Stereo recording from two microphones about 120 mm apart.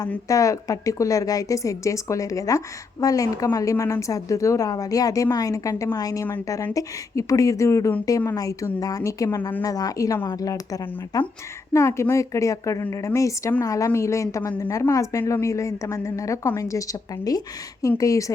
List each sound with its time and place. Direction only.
0.3 s a woman's voice: 30° left (ahead or behind)